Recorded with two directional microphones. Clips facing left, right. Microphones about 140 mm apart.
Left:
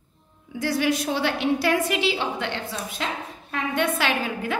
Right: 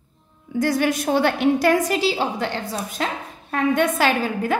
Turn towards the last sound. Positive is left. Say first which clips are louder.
# right 5 dB
turn(degrees=-45)  # may be behind; listen again after turning